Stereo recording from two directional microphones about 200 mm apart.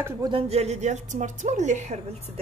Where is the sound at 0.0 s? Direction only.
20° right (ahead or behind).